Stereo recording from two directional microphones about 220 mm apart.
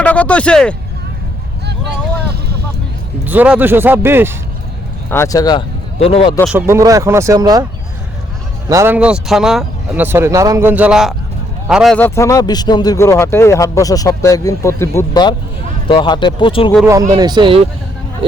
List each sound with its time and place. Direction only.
0.0 s a sound: 5° left (ahead or behind)
3.2 s speech: 5° right (ahead or behind)
5.1 s speech: 15° left (ahead or behind)
6.4 s speech: 5° right (ahead or behind)
8.7 s a man's voice: 10° right (ahead or behind); by 16.7 s 25° left (ahead or behind)
16.8 s speech: 15° right (ahead or behind)